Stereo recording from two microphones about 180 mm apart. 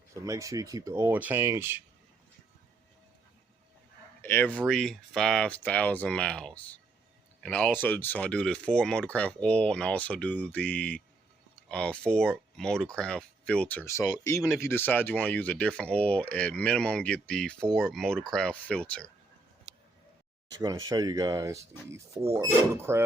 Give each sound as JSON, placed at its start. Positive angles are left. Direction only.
{"t": 0.1, "sound": "speech", "side_deg": -15}
{"t": 4.2, "sound": "speech", "side_deg": 10}
{"t": 20.5, "sound": "speech", "side_deg": -20}